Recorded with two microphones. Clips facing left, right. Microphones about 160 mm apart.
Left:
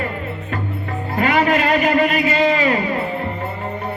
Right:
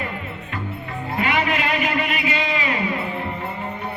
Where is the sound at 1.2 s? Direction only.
40° left (ahead or behind).